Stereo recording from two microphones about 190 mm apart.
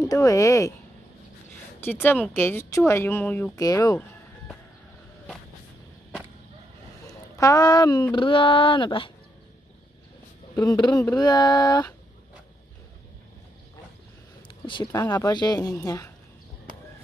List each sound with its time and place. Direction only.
0.0 s speech: 15° left (ahead or behind)
1.8 s speech: 10° left (ahead or behind)
7.1 s a sound: 15° left (ahead or behind)
8.1 s speech: 25° left (ahead or behind)
10.5 s speech: 20° left (ahead or behind)
14.7 s speech: 20° left (ahead or behind)